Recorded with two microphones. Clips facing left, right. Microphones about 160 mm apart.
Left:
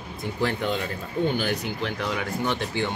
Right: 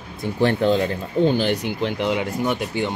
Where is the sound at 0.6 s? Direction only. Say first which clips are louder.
Right 8 dB; 35° right (ahead or behind); by 2.6 s 20° right (ahead or behind).